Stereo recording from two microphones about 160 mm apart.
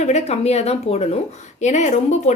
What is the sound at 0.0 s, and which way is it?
Speech, 45° left (ahead or behind).